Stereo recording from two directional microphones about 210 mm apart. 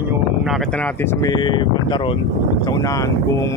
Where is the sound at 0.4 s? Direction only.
Centre (ahead or behind).